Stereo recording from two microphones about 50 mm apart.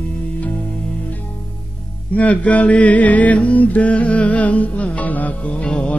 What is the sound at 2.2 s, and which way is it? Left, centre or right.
Mantra, left.